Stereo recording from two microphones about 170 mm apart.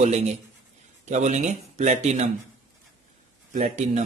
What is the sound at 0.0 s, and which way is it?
Speech, 40° right (ahead or behind).